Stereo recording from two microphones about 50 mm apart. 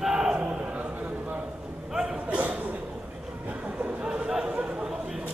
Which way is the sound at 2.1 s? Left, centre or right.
Right.